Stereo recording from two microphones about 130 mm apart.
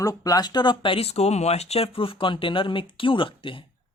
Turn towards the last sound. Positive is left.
turn(degrees=40)  # may be behind; listen again after turning